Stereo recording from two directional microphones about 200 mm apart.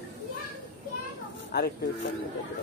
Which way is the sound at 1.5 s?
55° left (ahead or behind).